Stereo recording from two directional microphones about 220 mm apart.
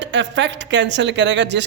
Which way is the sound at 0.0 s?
55° right (ahead or behind).